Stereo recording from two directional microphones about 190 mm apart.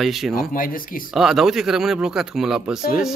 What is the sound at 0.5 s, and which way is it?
Speech, 45° left (ahead or behind).